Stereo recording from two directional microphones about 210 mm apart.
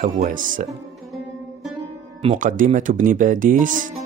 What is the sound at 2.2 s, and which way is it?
Speech, 40° right (ahead or behind).